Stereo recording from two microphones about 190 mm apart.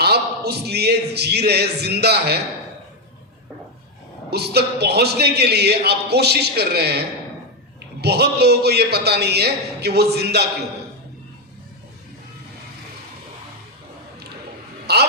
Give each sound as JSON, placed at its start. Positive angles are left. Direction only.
{"t": 0.0, "sound": "speech", "side_deg": -60}
{"t": 4.3, "sound": "a man's voice", "side_deg": -60}
{"t": 8.0, "sound": "a man's voice", "side_deg": -60}
{"t": 14.9, "sound": "a man's voice", "side_deg": -60}